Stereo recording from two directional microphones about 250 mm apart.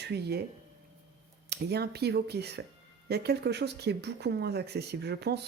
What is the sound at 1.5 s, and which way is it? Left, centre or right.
Speech, right.